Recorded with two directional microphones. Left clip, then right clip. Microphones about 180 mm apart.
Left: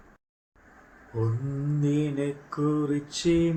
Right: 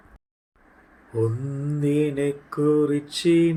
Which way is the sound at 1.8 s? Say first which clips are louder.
Right 6 dB; 55° right (ahead or behind).